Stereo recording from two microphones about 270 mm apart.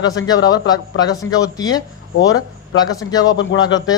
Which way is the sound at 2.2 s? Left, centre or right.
Left.